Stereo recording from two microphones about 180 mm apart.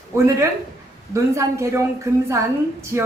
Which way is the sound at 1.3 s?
15° right (ahead or behind).